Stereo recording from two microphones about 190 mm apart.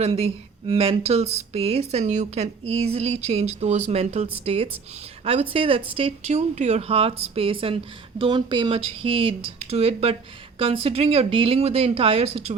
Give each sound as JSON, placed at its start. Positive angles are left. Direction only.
{"t": 0.0, "sound": "speech", "side_deg": -30}